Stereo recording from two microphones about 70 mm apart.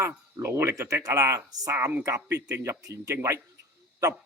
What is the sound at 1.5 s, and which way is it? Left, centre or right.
Speech, right.